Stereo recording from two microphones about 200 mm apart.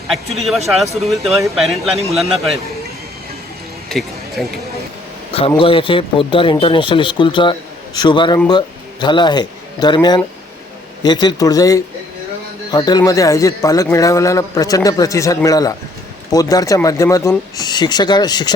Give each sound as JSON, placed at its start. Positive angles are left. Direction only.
{"t": 0.3, "sound": "speech", "side_deg": 0}
{"t": 3.8, "sound": "music", "side_deg": 0}
{"t": 5.3, "sound": "a man's voice", "side_deg": 25}